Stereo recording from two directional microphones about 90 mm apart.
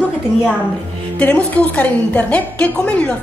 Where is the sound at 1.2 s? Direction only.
15° left (ahead or behind).